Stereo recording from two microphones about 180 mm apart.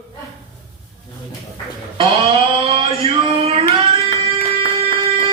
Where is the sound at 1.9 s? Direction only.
35° right (ahead or behind).